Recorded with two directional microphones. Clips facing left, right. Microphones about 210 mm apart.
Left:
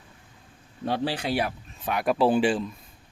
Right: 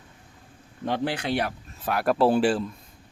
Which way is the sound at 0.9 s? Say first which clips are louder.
Even; 10° left (ahead or behind).